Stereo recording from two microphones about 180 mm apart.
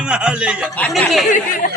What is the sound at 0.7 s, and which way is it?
Speech, 5° left (ahead or behind).